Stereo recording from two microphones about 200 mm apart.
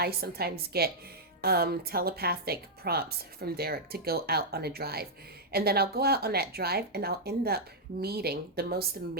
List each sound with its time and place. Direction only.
0.0 s a woman's voice: 50° right (ahead or behind)